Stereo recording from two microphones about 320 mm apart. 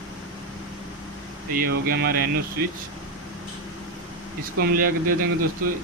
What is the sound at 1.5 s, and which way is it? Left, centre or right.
Speech, right.